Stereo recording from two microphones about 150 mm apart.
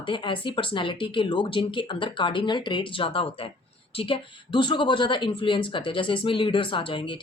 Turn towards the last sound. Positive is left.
turn(degrees=35)  # may be behind; listen again after turning